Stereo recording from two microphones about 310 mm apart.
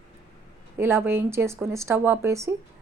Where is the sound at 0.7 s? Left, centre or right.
Centre.